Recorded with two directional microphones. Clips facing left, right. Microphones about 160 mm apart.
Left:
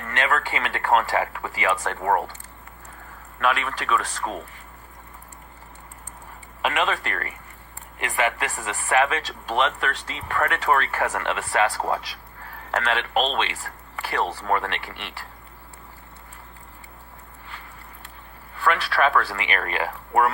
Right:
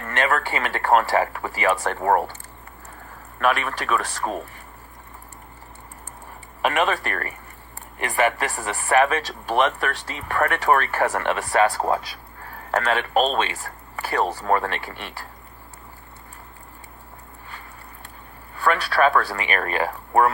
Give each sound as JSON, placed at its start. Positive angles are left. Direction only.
{"t": 0.2, "sound": "speech", "side_deg": -45}
{"t": 3.4, "sound": "speech", "side_deg": -45}
{"t": 6.6, "sound": "speech", "side_deg": -45}
{"t": 11.6, "sound": "speech", "side_deg": -30}
{"t": 18.5, "sound": "speech", "side_deg": -45}